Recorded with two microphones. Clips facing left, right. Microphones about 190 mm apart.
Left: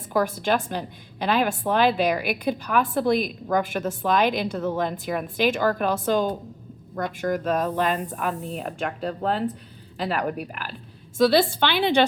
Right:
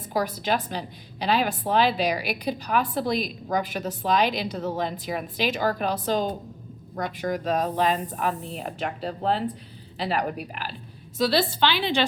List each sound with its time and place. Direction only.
0.1 s a woman's voice: 50° left (ahead or behind)